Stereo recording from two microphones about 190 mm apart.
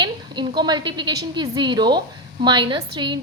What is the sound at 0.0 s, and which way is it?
A woman's voice, 25° right (ahead or behind).